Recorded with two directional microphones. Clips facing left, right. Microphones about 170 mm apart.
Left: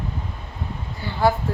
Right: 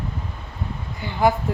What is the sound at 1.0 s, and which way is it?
Speech, 20° right (ahead or behind).